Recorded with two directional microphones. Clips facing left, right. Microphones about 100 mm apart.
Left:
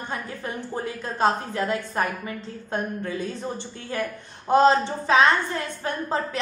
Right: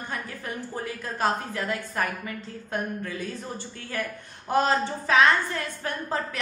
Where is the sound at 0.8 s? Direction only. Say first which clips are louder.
Left 4 dB; 25° left (ahead or behind).